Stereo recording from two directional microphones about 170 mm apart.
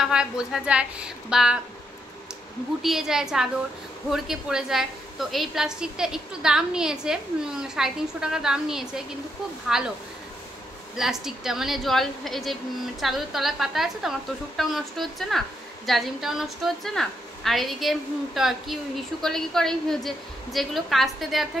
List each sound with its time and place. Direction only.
0.0 s a woman's voice: 5° right (ahead or behind)
2.8 s a woman's voice: centre (ahead or behind)
11.0 s a woman's voice: centre (ahead or behind)